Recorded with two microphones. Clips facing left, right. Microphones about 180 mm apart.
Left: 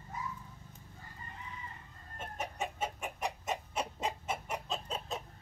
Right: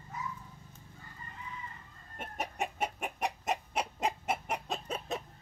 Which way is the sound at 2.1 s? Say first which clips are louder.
Right 2 dB; 65° right (ahead or behind).